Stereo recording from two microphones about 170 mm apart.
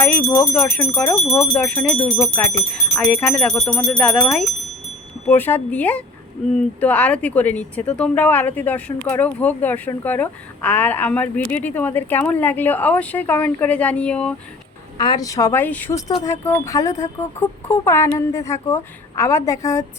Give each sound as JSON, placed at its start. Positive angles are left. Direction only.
{"t": 0.0, "sound": "speech", "side_deg": 10}
{"t": 14.9, "sound": "speech", "side_deg": 25}